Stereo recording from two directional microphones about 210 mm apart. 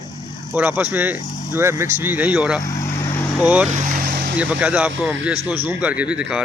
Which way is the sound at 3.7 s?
40° right (ahead or behind).